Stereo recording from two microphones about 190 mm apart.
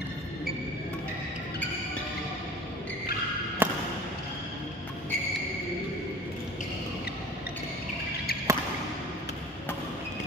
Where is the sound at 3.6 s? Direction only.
10° right (ahead or behind).